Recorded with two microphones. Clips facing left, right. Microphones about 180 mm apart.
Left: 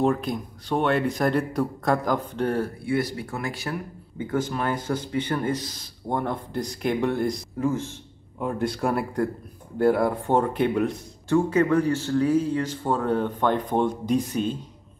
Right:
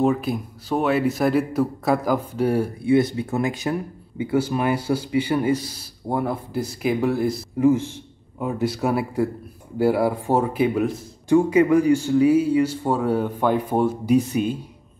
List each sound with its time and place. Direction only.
0.0 s speech: 5° right (ahead or behind)
2.8 s speech: 20° right (ahead or behind); by 7.6 s 5° right (ahead or behind)
7.6 s speech: 15° right (ahead or behind)
8.4 s speech: 5° right (ahead or behind)